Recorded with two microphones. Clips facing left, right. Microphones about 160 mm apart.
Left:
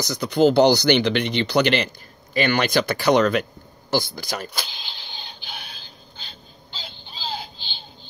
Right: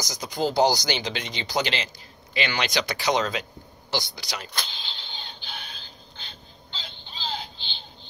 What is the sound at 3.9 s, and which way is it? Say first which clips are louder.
Speech: left 7 dB; 50° left (ahead or behind).